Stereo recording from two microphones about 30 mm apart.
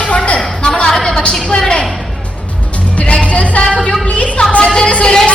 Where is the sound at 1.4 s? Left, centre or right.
Left.